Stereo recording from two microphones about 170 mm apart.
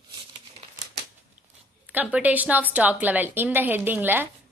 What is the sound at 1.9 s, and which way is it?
A woman's voice, 10° right (ahead or behind).